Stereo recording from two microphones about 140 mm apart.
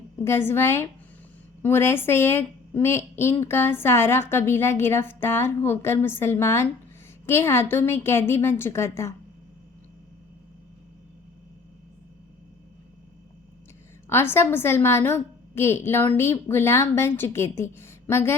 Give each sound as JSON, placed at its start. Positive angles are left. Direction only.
{"t": 0.2, "sound": "speech", "side_deg": 15}
{"t": 14.1, "sound": "speech", "side_deg": 15}